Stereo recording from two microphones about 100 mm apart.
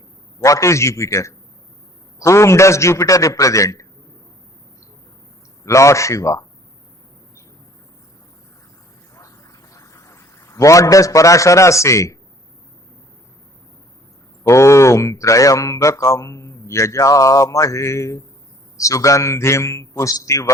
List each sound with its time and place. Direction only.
0.3 s speech: 30° left (ahead or behind)
5.6 s speech: 30° left (ahead or behind)
9.1 s a sound: 35° left (ahead or behind)
14.4 s speech: 30° left (ahead or behind)